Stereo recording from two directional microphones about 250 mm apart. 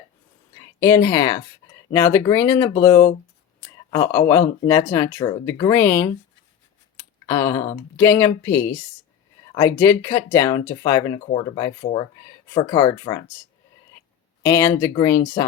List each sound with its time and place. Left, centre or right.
0.5 s speech: centre
6.9 s a sound: centre
7.9 s speech: centre
14.4 s speech: centre